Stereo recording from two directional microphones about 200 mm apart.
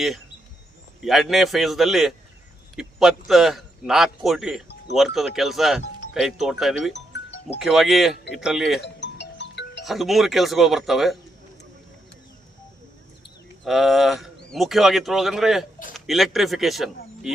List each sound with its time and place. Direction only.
1.0 s speech: centre (ahead or behind)
6.9 s music: 60° left (ahead or behind)
7.6 s speech: centre (ahead or behind)
9.0 s music: 60° left (ahead or behind)
9.8 s speech: centre (ahead or behind)
13.7 s speech: centre (ahead or behind)